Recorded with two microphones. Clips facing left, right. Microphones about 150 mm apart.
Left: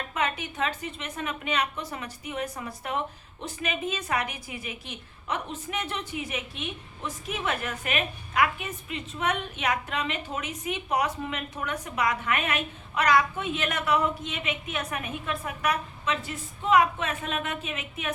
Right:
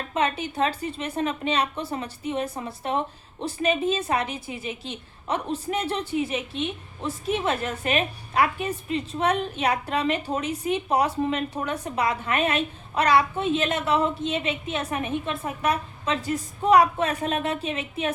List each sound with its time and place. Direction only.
0.1 s a woman's voice: 30° right (ahead or behind)